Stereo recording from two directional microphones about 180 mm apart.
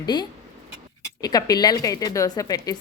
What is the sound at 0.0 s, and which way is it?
A woman's voice, 25° left (ahead or behind).